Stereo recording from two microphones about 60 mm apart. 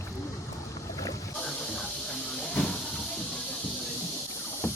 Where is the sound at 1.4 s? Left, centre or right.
Centre.